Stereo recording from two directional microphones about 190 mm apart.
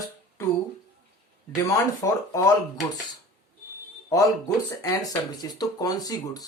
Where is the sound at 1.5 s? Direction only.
20° left (ahead or behind).